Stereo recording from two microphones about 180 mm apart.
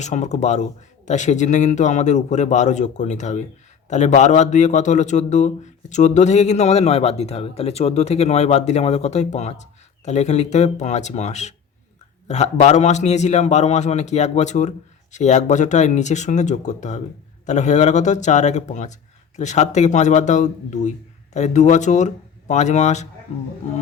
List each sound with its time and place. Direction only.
0.0 s speech: 40° left (ahead or behind)